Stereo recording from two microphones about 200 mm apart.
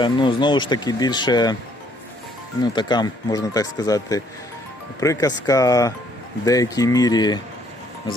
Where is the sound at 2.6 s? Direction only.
20° left (ahead or behind).